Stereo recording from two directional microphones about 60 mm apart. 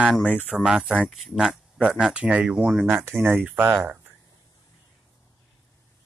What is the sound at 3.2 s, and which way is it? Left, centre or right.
Speech, right.